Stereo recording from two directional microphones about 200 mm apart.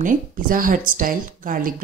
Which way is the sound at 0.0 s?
40° right (ahead or behind).